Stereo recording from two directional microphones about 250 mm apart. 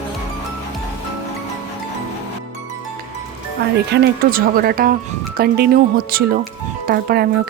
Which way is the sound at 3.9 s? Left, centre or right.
Right.